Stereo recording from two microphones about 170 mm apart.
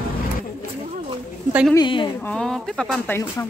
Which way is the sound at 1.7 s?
25° left (ahead or behind).